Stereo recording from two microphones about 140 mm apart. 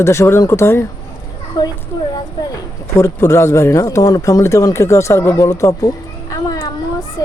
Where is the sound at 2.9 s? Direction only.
20° left (ahead or behind).